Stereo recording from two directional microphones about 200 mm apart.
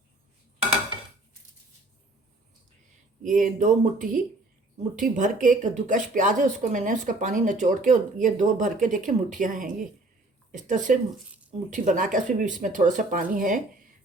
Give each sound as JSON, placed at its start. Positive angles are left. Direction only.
{"t": 3.2, "sound": "speech", "side_deg": -40}